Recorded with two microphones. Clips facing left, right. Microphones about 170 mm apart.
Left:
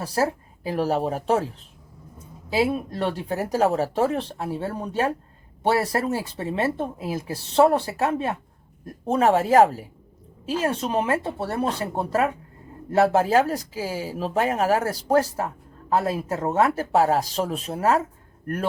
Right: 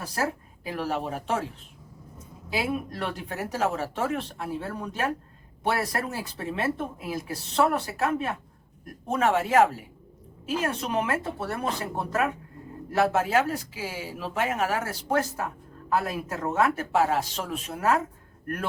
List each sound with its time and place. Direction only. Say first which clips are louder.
0.0 s speech: left 6 dB; 35° left (ahead or behind)
2.5 s speech: left 6 dB; 30° left (ahead or behind)